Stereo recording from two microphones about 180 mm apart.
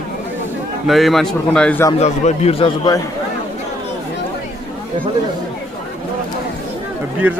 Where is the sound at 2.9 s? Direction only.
20° left (ahead or behind).